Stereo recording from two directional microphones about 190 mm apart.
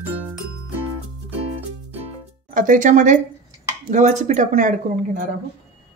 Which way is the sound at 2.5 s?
45° right (ahead or behind).